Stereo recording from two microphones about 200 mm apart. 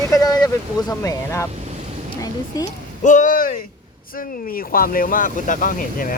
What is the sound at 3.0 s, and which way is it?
Speech, 40° left (ahead or behind).